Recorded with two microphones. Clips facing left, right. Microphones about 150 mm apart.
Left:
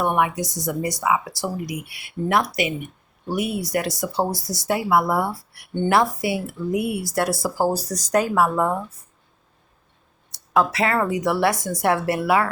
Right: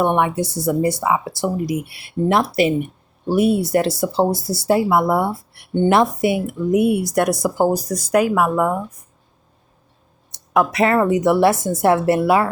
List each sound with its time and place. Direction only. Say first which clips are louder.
0.0 s speech: right 4 dB; 25° right (ahead or behind)
10.3 s speech: right 3 dB; 20° right (ahead or behind)